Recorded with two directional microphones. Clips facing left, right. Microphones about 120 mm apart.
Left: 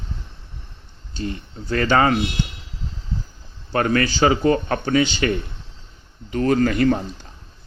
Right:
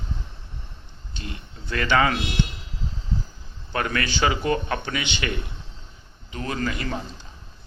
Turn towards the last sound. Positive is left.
turn(degrees=50)  # may be behind; listen again after turning